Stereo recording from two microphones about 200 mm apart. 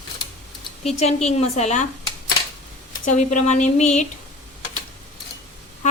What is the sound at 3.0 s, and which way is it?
Speech, 40° left (ahead or behind).